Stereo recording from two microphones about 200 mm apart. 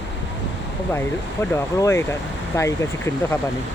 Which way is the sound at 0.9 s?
10° left (ahead or behind).